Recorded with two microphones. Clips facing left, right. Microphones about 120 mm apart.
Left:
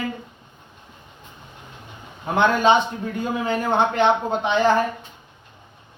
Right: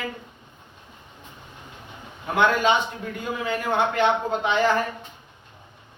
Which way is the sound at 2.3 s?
25° left (ahead or behind).